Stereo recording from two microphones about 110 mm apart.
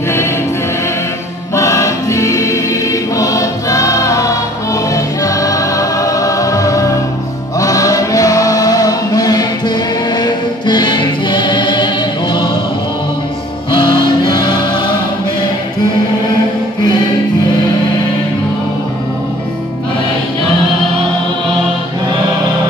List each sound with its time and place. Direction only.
1.5 s choir: 25° left (ahead or behind); by 12.4 s 50° left (ahead or behind)
13.7 s music: 45° left (ahead or behind)